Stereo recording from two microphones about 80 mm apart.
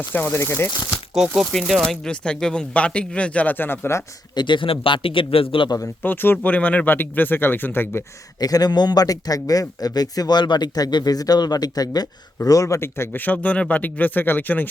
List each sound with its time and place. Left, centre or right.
0.1 s speech: left
1.5 s speech: centre; by 4.0 s left
4.4 s a man's voice: left
6.0 s speech: left
8.4 s a man's voice: left